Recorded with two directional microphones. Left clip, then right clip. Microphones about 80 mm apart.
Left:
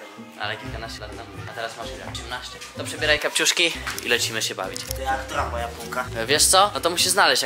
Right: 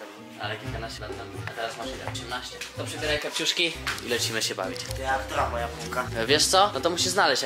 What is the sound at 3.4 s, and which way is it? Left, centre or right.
Speech, left.